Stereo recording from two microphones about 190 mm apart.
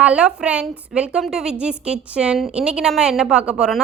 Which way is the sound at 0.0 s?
5° right (ahead or behind).